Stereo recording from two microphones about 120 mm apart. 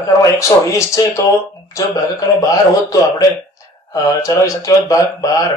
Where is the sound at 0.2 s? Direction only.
25° left (ahead or behind).